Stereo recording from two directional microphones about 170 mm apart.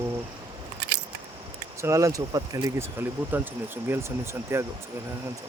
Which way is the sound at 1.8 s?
20° right (ahead or behind).